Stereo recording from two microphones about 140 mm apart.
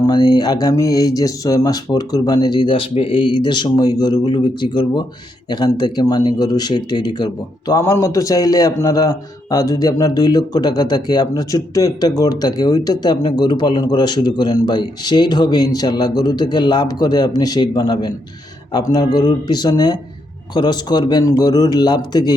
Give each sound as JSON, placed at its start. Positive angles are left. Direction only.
{"t": 0.1, "sound": "a man's voice", "side_deg": 30}